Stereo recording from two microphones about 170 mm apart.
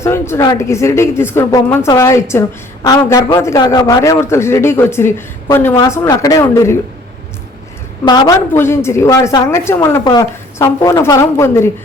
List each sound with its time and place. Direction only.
0.0 s a man's voice: 15° left (ahead or behind)
8.0 s a woman's voice: 25° left (ahead or behind)
8.5 s a man's voice: 15° left (ahead or behind)